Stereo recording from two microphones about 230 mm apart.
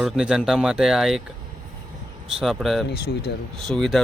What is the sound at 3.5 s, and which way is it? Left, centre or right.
Speech, centre.